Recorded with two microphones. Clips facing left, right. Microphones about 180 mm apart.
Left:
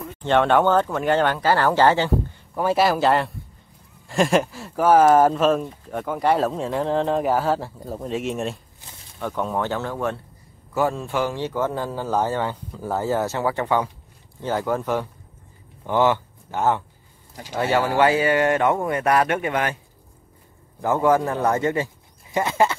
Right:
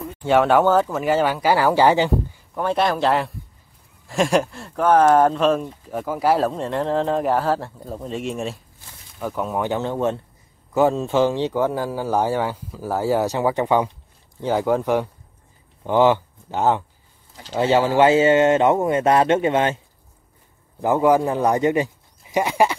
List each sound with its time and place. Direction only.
0.2 s speech: 5° right (ahead or behind)
2.5 s speech: 5° left (ahead or behind); by 16.8 s 20° right (ahead or behind)
17.3 s a sound: 10° left (ahead or behind)
17.6 s speech: 20° right (ahead or behind)
20.8 s speech: 15° right (ahead or behind)